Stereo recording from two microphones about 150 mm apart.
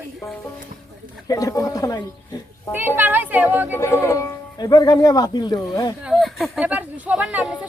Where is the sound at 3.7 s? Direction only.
20° left (ahead or behind).